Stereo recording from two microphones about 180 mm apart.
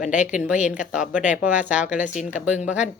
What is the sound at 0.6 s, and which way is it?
Speech, 45° left (ahead or behind).